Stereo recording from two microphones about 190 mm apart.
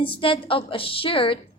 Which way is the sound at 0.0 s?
25° left (ahead or behind).